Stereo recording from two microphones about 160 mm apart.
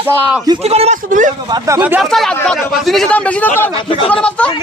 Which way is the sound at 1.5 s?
25° right (ahead or behind).